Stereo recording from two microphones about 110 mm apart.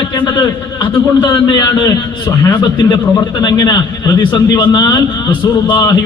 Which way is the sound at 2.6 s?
45° left (ahead or behind).